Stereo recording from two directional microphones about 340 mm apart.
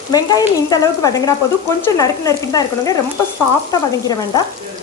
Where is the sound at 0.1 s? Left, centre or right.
Centre.